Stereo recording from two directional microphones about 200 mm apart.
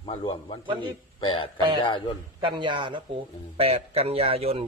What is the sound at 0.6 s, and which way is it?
Speech, 25° right (ahead or behind).